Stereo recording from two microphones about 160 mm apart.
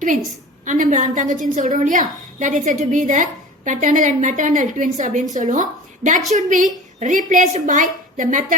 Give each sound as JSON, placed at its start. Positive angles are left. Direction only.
{"t": 0.6, "sound": "a woman's voice", "side_deg": -50}